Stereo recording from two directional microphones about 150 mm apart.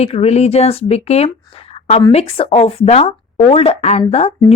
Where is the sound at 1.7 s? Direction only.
45° left (ahead or behind).